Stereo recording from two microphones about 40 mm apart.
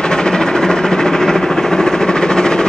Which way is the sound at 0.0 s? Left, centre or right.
Centre.